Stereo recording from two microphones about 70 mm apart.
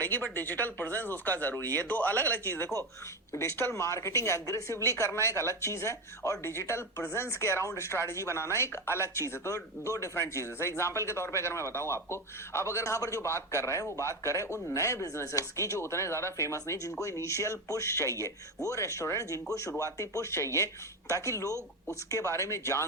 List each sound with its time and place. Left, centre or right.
0.3 s speech: left
3.3 s a woman's voice: left